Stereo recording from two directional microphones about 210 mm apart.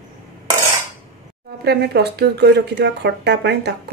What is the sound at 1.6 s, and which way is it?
Speech, 50° right (ahead or behind).